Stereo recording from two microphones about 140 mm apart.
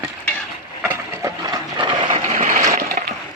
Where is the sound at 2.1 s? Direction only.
60° right (ahead or behind).